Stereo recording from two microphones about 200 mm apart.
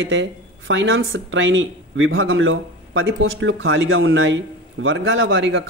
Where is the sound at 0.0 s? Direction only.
65° right (ahead or behind).